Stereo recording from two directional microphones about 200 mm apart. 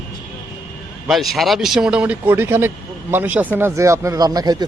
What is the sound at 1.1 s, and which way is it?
Speech, centre (ahead or behind).